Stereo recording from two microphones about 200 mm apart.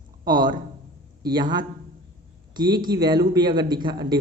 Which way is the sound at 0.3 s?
20° right (ahead or behind).